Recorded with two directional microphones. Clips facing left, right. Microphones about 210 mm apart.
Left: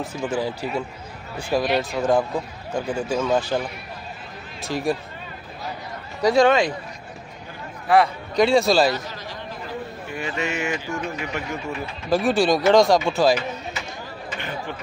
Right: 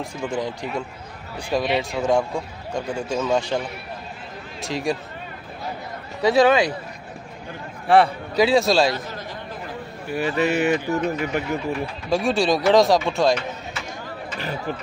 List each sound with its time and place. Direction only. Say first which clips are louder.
0.0 s speech: left 1 dB; 5° left (ahead or behind)
6.2 s speech: even; 5° right (ahead or behind)
7.9 s a man's voice: right 2 dB; 30° right (ahead or behind)
8.4 s speech: even; centre (ahead or behind)
10.1 s speech: right 6 dB; 35° right (ahead or behind)
12.1 s speech: left 1 dB; centre (ahead or behind)
14.4 s speech: right 4 dB; 40° right (ahead or behind)